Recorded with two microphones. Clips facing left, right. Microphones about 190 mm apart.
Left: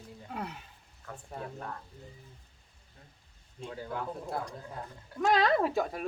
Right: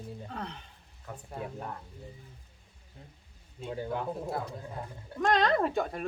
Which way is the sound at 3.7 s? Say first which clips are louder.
Right 4 dB; 20° right (ahead or behind).